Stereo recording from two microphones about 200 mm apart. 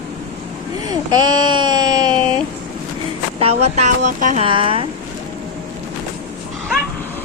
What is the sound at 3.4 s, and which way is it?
Speech, 30° right (ahead or behind).